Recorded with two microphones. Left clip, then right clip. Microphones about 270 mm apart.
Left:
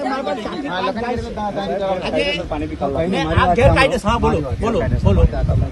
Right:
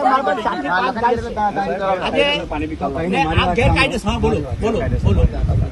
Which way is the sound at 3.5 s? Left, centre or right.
Centre.